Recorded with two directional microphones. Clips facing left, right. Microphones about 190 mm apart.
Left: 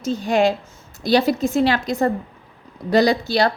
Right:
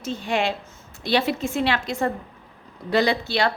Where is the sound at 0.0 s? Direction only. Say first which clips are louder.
Left 7 dB; 40° left (ahead or behind).